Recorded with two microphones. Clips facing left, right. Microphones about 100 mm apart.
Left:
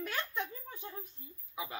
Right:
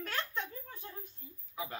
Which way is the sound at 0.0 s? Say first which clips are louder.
Left 1 dB; 10° left (ahead or behind).